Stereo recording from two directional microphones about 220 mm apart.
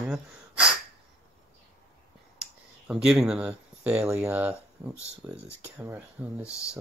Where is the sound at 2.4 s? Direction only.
5° right (ahead or behind).